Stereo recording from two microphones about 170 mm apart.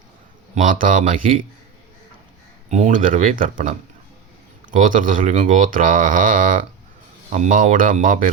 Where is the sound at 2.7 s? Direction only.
50° right (ahead or behind).